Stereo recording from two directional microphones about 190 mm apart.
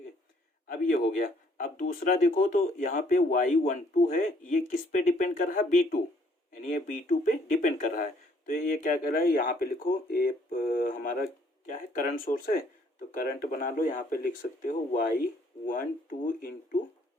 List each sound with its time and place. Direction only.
0.7 s speech: 45° left (ahead or behind)